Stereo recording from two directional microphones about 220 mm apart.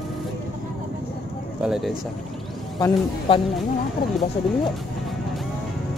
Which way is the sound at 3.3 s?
25° left (ahead or behind).